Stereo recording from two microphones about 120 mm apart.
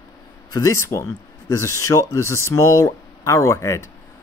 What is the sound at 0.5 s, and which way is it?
Speech, 25° left (ahead or behind).